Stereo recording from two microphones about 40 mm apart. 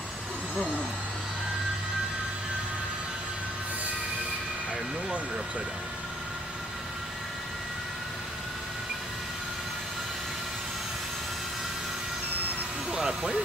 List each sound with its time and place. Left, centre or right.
12.9 s speech: centre